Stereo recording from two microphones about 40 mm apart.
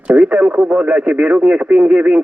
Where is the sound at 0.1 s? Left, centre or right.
Right.